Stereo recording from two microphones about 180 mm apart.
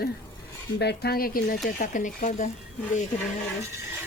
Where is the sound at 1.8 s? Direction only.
45° left (ahead or behind).